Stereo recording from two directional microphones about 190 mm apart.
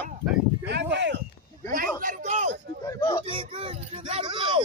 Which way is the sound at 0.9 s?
65° right (ahead or behind).